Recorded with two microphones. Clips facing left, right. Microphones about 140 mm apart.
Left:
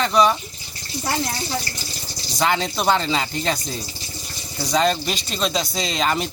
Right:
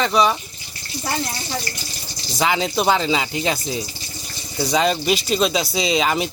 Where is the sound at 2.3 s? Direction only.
Centre (ahead or behind).